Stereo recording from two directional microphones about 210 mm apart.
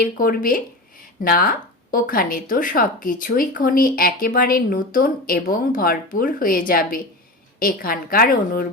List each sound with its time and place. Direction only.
0.0 s a woman's voice: 45° left (ahead or behind)